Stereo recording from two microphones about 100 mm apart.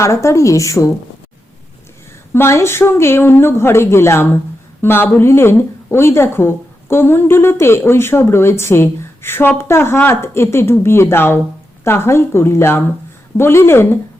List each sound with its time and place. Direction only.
0.0 s speech: 30° left (ahead or behind)
2.3 s a woman's voice: 25° left (ahead or behind)